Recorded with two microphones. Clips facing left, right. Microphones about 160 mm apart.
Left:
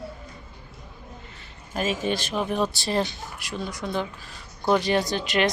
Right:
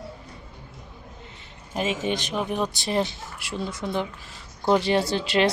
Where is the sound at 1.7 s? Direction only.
20° right (ahead or behind).